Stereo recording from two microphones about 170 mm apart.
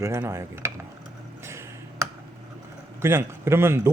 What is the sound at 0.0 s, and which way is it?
Speech, 15° right (ahead or behind).